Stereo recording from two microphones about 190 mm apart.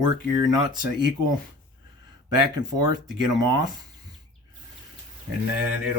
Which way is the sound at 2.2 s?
20° right (ahead or behind).